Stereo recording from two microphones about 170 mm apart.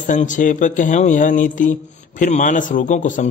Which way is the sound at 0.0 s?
50° left (ahead or behind).